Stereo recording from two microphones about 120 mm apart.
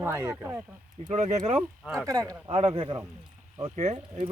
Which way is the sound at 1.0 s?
75° right (ahead or behind).